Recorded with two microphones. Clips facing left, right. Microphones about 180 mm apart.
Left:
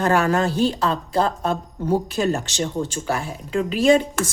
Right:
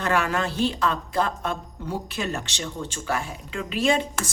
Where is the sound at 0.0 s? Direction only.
40° left (ahead or behind).